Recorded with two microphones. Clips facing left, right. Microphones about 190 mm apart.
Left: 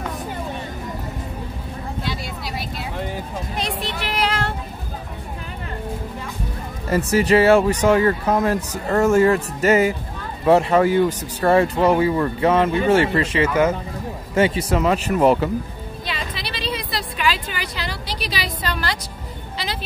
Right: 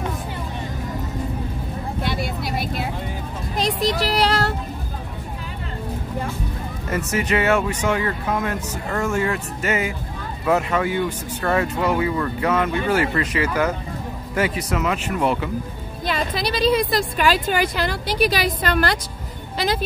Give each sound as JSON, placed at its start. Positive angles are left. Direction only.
{"t": 2.0, "sound": "vehicle", "side_deg": -55}
{"t": 3.5, "sound": "speech", "side_deg": -35}
{"t": 6.9, "sound": "speech", "side_deg": 35}
{"t": 16.1, "sound": "a woman's voice", "side_deg": -45}
{"t": 19.5, "sound": "vehicle", "side_deg": -45}